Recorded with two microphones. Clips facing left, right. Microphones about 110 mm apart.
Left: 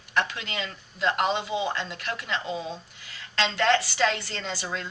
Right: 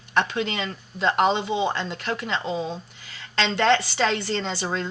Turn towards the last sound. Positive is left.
turn(degrees=-35)  # may be behind; listen again after turning